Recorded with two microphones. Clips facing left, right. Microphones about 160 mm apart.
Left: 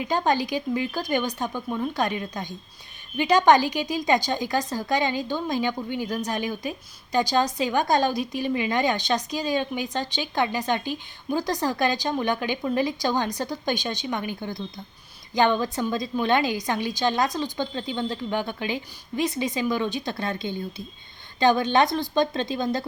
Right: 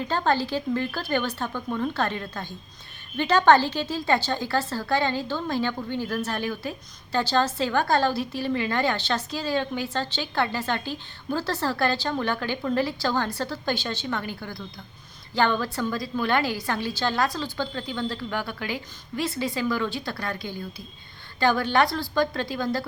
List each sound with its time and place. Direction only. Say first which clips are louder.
0.0 s a woman's voice: left 1 dB; 15° left (ahead or behind)